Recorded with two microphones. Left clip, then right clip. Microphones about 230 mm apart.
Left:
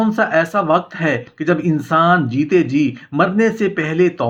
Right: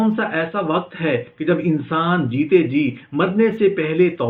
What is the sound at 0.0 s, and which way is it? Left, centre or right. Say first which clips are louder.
Speech: left 5 dB; left.